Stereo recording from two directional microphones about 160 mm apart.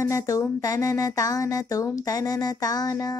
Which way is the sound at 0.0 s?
15° left (ahead or behind).